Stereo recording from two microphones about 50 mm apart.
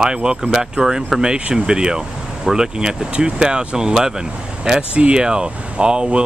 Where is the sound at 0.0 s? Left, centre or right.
Centre.